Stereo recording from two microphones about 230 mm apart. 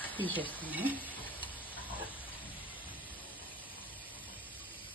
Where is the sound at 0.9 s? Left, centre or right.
Centre.